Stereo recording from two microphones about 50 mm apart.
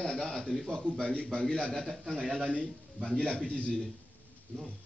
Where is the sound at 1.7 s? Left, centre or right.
Centre.